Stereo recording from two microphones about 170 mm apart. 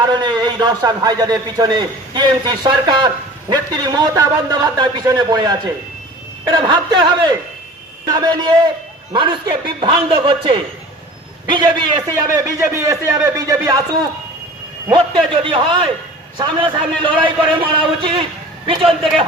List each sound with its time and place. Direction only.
0.0 s a man's voice: 25° right (ahead or behind)